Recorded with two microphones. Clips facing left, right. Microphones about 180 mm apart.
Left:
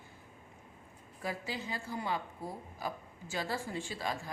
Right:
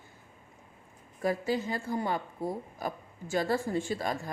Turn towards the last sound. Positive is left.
turn(degrees=-50)  # may be behind; listen again after turning